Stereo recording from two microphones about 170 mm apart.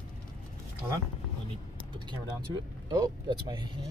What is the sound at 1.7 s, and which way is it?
Vehicle, 30° right (ahead or behind).